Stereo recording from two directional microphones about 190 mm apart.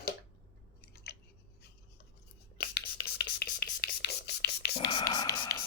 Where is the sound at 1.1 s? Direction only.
55° left (ahead or behind).